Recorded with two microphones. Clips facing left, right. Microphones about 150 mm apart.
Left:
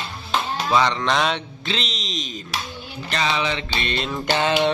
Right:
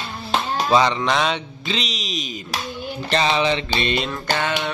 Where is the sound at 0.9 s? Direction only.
5° right (ahead or behind).